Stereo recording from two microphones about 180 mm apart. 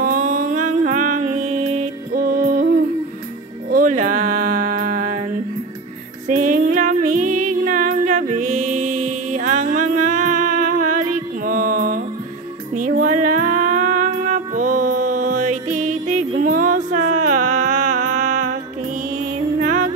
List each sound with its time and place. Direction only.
0.0 s music: 45° right (ahead or behind)
3.7 s music: 45° right (ahead or behind)
6.2 s music: 45° right (ahead or behind)
19.6 s music: 45° right (ahead or behind)